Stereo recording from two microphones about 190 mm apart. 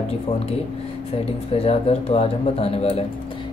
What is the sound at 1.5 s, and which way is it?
Speech, 30° left (ahead or behind).